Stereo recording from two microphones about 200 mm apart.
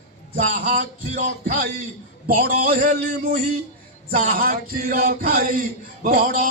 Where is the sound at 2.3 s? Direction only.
45° right (ahead or behind).